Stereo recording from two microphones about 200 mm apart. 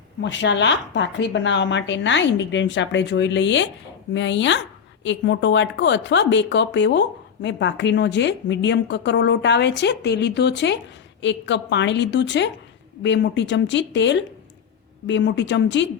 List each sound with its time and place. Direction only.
0.2 s a woman's voice: 60° left (ahead or behind)